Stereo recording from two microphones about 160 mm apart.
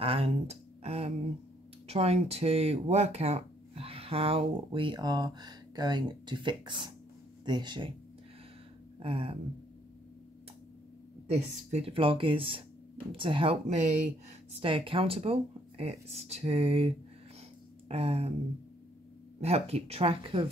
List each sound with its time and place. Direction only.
0.0 s speech: 40° right (ahead or behind)
9.0 s speech: 35° right (ahead or behind)
11.3 s speech: 40° right (ahead or behind)
17.8 s a sound: 40° right (ahead or behind)
19.4 s speech: 40° right (ahead or behind)